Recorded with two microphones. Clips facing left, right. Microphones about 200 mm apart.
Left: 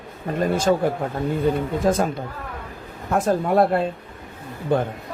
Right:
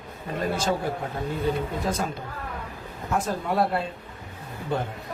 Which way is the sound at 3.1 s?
50° left (ahead or behind).